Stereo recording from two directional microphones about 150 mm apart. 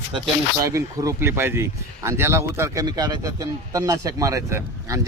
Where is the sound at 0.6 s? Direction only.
20° right (ahead or behind).